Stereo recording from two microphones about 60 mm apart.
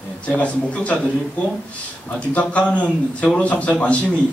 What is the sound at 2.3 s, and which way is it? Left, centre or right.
A man's voice, left.